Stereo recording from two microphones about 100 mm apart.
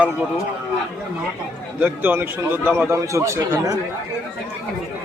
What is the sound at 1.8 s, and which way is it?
A man's voice, 20° right (ahead or behind).